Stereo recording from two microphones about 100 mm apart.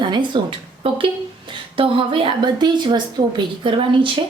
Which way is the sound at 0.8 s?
60° right (ahead or behind).